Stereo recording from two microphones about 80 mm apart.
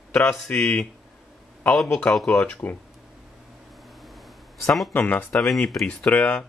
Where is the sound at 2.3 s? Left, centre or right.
Centre.